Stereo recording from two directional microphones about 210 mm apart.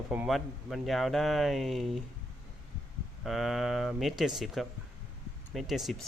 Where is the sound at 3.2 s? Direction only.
Centre (ahead or behind).